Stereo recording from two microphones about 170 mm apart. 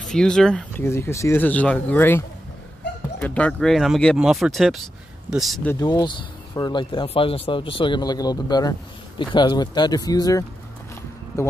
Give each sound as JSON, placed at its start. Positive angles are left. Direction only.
{"t": 0.1, "sound": "speech", "side_deg": 5}
{"t": 5.7, "sound": "speech", "side_deg": 20}